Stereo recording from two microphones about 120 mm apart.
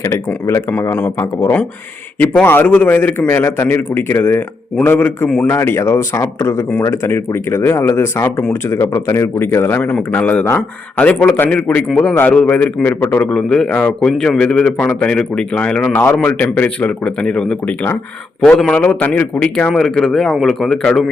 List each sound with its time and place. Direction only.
0.1 s a man's voice: 25° left (ahead or behind)
13.3 s a man's voice: 5° left (ahead or behind)